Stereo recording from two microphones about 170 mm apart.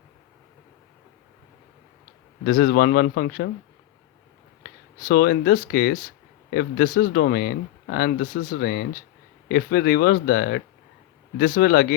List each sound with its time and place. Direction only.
2.4 s speech: 55° left (ahead or behind)
4.9 s speech: 60° left (ahead or behind)